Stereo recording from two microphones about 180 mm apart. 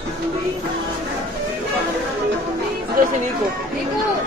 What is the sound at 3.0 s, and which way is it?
Speech, 50° right (ahead or behind).